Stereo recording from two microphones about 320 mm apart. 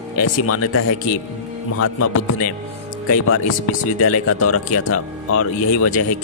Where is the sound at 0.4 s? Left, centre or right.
Left.